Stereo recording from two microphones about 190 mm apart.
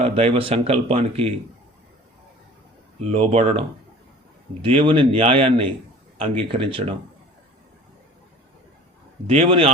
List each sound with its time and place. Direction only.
0.0 s a man's voice: 30° right (ahead or behind)
3.1 s a man's voice: 30° right (ahead or behind)
4.6 s a man's voice: 30° right (ahead or behind)
9.2 s a man's voice: 30° right (ahead or behind)